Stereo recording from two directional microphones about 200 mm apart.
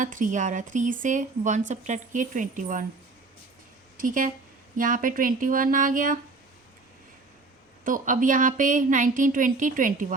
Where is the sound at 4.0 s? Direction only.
40° right (ahead or behind).